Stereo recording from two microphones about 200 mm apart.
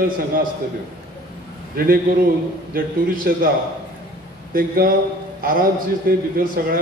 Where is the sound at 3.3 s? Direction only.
50° right (ahead or behind).